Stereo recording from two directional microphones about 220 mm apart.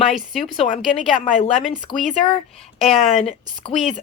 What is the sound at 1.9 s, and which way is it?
Speech, 20° left (ahead or behind).